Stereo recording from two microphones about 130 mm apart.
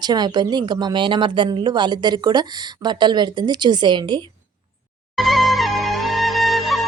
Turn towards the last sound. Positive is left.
turn(degrees=0)  # may be behind; listen again after turning